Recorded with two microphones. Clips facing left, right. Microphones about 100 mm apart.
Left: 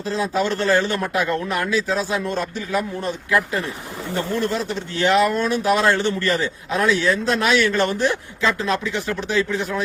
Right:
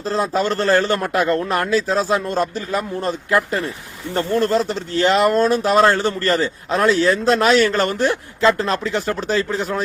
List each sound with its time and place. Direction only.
0.1 s a man's voice: 50° right (ahead or behind)
4.4 s speech: 40° right (ahead or behind)
9.3 s speech: 35° right (ahead or behind)